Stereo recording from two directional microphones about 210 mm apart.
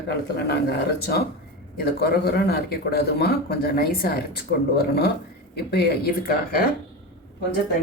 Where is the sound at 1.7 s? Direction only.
50° left (ahead or behind).